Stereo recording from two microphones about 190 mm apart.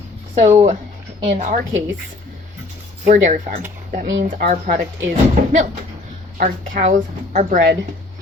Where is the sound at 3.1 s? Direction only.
40° right (ahead or behind).